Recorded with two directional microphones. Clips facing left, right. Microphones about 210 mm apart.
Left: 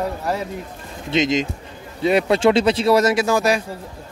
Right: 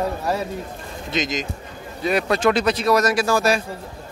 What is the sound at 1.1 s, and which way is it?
Speech, 25° left (ahead or behind).